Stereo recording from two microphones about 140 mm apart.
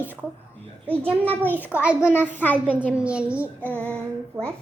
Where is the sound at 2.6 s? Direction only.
10° left (ahead or behind).